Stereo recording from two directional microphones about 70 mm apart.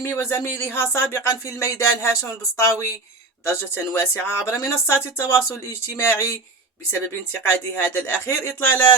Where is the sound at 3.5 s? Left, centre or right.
Left.